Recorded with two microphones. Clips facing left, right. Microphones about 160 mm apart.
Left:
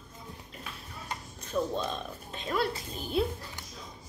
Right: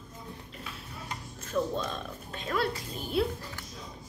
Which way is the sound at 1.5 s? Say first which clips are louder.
Right 1 dB; 10° left (ahead or behind).